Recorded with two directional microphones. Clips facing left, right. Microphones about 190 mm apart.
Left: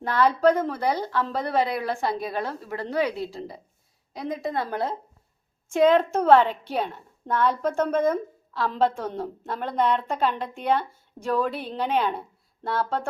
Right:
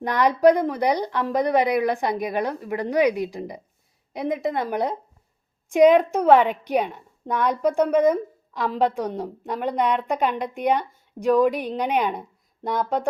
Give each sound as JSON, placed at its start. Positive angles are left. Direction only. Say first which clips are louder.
{"t": 0.0, "sound": "a woman's voice", "louder": "right 3 dB", "side_deg": -15}